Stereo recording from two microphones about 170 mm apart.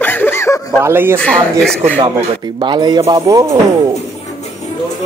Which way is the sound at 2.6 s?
25° right (ahead or behind).